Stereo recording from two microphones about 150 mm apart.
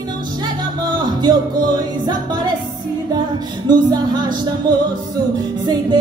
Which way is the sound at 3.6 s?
30° right (ahead or behind).